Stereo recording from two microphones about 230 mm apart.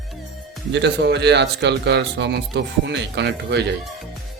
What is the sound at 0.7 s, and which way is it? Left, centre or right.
Speech, right.